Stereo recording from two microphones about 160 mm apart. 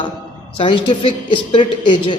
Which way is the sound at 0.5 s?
35° left (ahead or behind).